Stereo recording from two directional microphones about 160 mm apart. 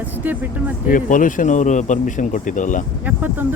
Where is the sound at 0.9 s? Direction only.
55° left (ahead or behind).